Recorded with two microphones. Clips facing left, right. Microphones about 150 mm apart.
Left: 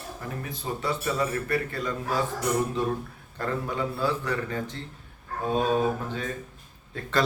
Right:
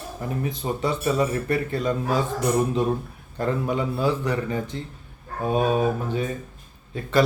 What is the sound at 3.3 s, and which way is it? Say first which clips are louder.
Speech: right 5 dB; 15° right (ahead or behind).